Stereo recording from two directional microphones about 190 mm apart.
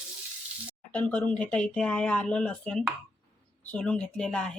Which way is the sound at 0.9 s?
5° left (ahead or behind).